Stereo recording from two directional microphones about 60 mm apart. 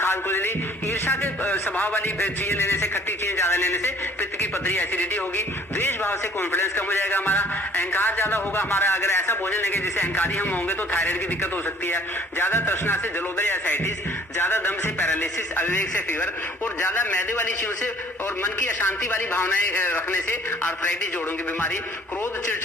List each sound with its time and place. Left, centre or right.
0.0 s music: left
1.5 s music: left
12.4 s music: left
14.3 s speech: left
15.2 s music: left